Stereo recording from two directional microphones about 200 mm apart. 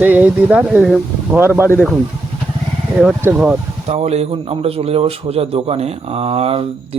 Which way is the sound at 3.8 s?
30° right (ahead or behind).